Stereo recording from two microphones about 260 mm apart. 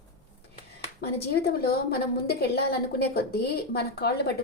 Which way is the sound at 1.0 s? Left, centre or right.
Left.